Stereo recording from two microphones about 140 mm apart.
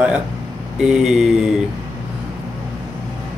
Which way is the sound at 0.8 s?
5° right (ahead or behind).